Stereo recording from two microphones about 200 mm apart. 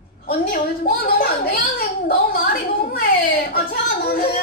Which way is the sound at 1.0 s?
45° left (ahead or behind).